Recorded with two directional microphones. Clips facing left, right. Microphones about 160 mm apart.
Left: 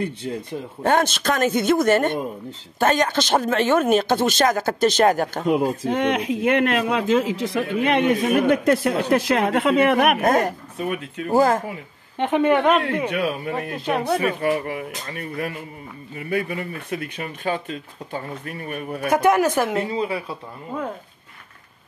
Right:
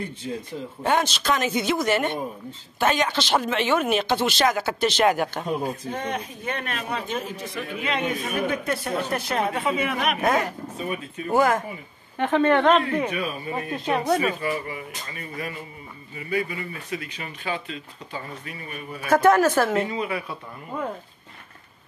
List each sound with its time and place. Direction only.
0.8 s speech: 50° left (ahead or behind)
5.8 s speech: 90° left; by 10.1 s 60° left (ahead or behind)
10.2 s speech: 45° left (ahead or behind)
11.3 s speech: 35° left (ahead or behind)
12.2 s a woman's voice: 15° left (ahead or behind)
13.1 s speech: 70° left (ahead or behind)
13.8 s speech: centre (ahead or behind)
14.4 s speech: 60° left (ahead or behind)
19.0 s a woman's voice: 15° left (ahead or behind)
19.9 s speech: 30° left (ahead or behind)